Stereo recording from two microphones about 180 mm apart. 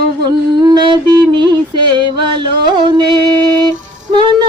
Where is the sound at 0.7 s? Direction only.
25° right (ahead or behind).